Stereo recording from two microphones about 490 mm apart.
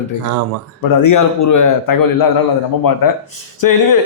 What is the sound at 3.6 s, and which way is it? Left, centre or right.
Speech, left.